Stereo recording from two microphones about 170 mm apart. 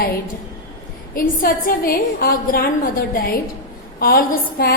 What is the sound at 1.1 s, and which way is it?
A woman's voice, 55° left (ahead or behind).